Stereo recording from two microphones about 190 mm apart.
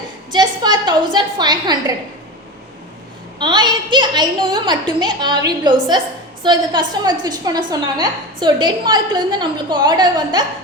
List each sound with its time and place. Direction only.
0.3 s a sound: 20° right (ahead or behind)
1.1 s a woman's voice: 20° right (ahead or behind)
3.3 s a woman's voice: 25° right (ahead or behind)